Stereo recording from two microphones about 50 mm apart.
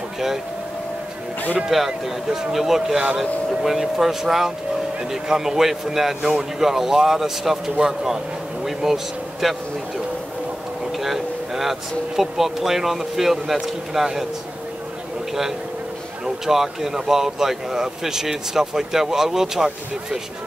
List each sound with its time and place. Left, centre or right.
1.9 s speech: centre
10.9 s a sound: centre
12.2 s speech: centre
16.4 s speech: centre